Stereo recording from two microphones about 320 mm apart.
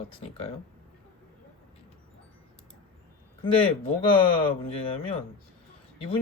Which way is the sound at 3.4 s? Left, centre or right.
Centre.